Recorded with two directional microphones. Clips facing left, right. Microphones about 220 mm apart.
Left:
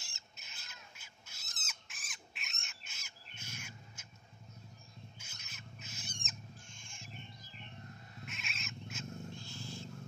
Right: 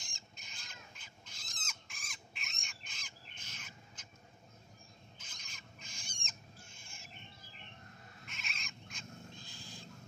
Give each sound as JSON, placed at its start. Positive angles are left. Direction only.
{"t": 0.0, "sound": "a sound", "side_deg": 5}
{"t": 5.2, "sound": "rodents", "side_deg": 5}
{"t": 6.7, "sound": "owl", "side_deg": -5}
{"t": 8.3, "sound": "cat", "side_deg": 0}
{"t": 9.3, "sound": "wild animals", "side_deg": -15}